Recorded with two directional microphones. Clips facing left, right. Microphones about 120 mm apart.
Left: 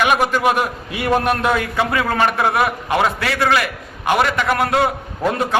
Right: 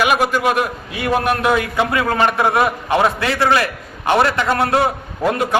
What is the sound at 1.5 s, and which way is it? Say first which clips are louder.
A man's voice: right 2 dB; 20° right (ahead or behind).